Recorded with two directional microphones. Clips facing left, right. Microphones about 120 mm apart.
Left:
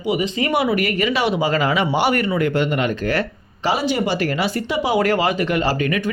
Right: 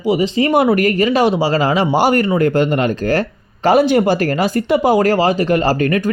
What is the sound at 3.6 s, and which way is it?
Speech, 55° right (ahead or behind).